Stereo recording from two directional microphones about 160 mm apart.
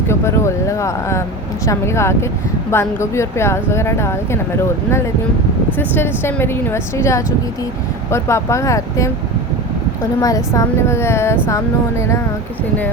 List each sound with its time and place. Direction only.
0.1 s speech: 15° left (ahead or behind)
5.7 s speech: 15° left (ahead or behind)
10.2 s speech: 20° left (ahead or behind)